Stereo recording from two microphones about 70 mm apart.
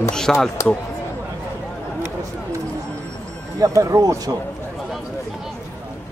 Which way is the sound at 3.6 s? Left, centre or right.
Right.